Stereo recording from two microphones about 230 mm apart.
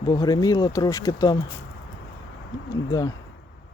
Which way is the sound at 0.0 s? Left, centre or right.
Centre.